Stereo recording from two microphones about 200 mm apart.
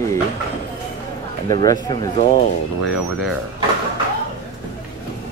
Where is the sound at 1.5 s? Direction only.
20° left (ahead or behind).